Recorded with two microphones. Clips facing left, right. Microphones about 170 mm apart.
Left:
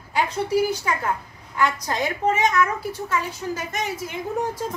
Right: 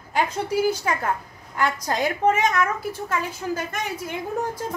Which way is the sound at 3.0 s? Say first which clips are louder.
Even; 55° right (ahead or behind).